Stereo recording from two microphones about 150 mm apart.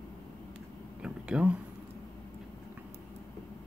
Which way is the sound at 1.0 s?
5° right (ahead or behind).